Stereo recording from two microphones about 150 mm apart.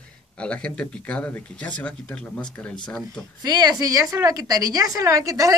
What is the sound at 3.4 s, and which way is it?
A woman's voice, 25° right (ahead or behind).